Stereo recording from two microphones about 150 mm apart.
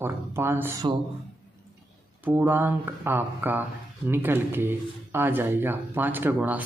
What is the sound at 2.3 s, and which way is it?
Speech, 15° right (ahead or behind).